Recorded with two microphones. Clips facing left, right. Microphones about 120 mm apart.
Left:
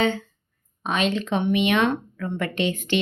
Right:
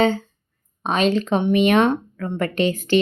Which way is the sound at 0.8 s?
35° right (ahead or behind).